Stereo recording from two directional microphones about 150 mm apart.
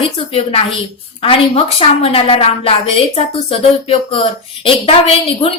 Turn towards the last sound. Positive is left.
turn(degrees=40)  # may be behind; listen again after turning